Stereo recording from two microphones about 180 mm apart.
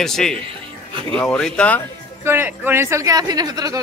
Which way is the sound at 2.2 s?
10° right (ahead or behind).